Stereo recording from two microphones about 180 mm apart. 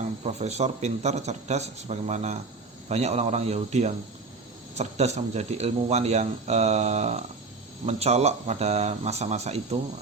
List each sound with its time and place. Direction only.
0.3 s speech: 40° right (ahead or behind)